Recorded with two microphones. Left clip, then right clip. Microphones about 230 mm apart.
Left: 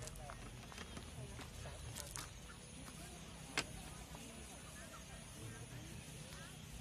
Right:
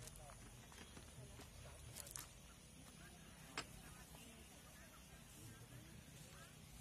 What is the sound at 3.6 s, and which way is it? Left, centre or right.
Vehicle, left.